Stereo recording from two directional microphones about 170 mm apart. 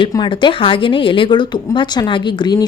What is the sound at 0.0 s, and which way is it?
Speech, 30° left (ahead or behind).